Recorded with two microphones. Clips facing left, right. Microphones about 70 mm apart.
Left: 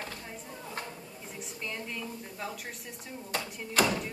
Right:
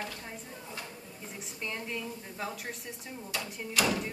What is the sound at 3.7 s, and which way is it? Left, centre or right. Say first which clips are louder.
Speech: left 2 dB; left.